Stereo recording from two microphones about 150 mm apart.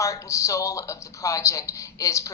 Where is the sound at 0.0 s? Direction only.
20° left (ahead or behind).